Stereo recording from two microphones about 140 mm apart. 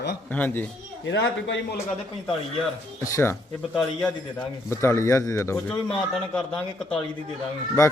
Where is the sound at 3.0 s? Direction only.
20° left (ahead or behind).